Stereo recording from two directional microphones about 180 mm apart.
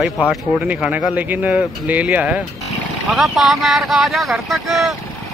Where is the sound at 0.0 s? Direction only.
5° right (ahead or behind).